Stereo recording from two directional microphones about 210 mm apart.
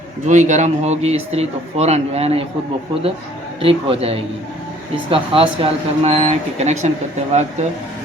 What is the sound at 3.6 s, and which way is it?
Speech, 25° right (ahead or behind).